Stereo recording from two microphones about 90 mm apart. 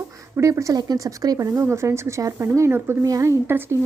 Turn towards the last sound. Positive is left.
turn(degrees=-25)  # may be behind; listen again after turning